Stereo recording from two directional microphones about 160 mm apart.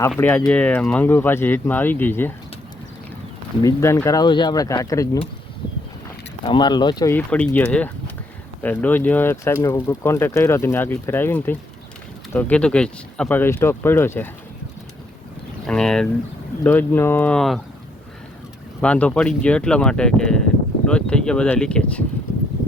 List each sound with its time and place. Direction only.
0.2 s speech: 10° left (ahead or behind)
3.6 s speech: 20° left (ahead or behind)
6.4 s speech: 30° left (ahead or behind)
7.1 s speech: 5° left (ahead or behind)
15.6 s speech: 5° left (ahead or behind)
18.8 s speech: 10° left (ahead or behind)